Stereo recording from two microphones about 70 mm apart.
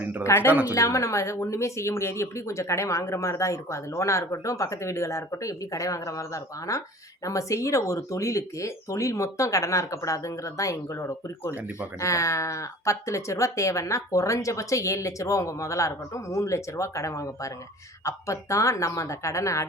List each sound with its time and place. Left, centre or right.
0.3 s speech: left